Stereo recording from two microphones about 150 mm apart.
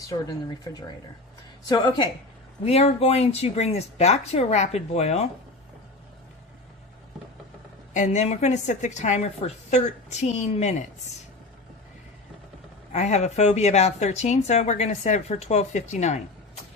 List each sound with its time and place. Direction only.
0.1 s speech: 25° left (ahead or behind)
2.6 s speech: 45° left (ahead or behind)
7.9 s speech: 50° left (ahead or behind)
12.9 s speech: 50° left (ahead or behind)